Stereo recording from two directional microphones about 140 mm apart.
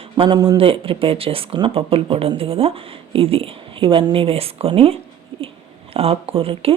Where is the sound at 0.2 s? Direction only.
30° right (ahead or behind).